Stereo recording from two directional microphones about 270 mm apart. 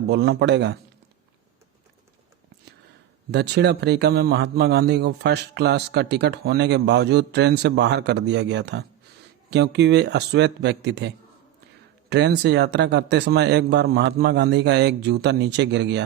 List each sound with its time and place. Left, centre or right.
0.1 s a man's voice: right
3.3 s a man's voice: right